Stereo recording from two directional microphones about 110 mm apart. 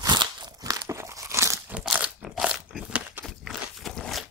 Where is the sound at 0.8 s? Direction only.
25° right (ahead or behind).